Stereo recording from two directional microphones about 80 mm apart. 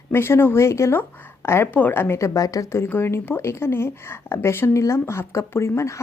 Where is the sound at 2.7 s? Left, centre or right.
Left.